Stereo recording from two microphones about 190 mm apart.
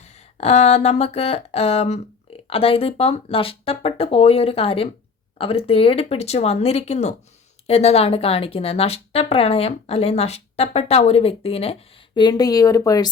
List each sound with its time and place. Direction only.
0.0 s a woman's voice: 35° left (ahead or behind); by 13.1 s 20° left (ahead or behind)